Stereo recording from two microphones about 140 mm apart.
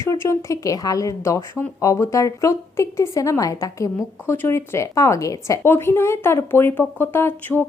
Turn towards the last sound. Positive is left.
turn(degrees=15)  # may be behind; listen again after turning